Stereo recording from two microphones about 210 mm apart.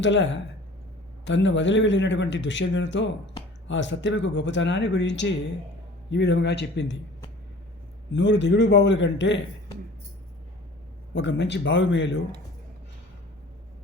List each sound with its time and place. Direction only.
0.0 s a man's voice: 60° left (ahead or behind)
8.1 s a man's voice: 60° left (ahead or behind)
11.1 s a man's voice: 55° left (ahead or behind)